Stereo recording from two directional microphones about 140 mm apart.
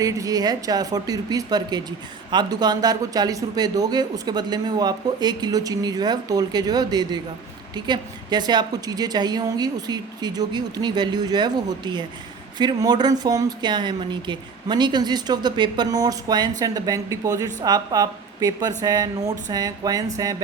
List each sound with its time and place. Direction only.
0.0 s speech: 25° right (ahead or behind)